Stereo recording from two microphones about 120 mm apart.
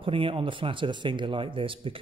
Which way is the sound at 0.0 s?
45° right (ahead or behind).